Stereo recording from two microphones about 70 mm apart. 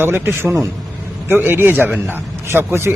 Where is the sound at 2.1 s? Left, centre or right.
Right.